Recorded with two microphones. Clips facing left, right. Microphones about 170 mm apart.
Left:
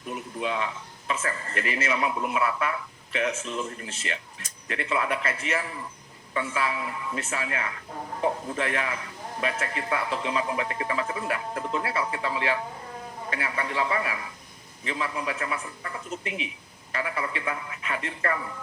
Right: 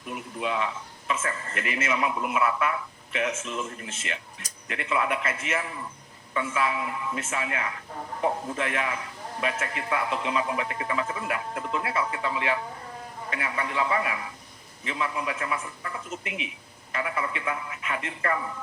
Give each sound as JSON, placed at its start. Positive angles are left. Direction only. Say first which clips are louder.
{"t": 0.1, "sound": "speech", "louder": "even", "side_deg": 30}
{"t": 16.0, "sound": "speech", "louder": "left 2 dB", "side_deg": 35}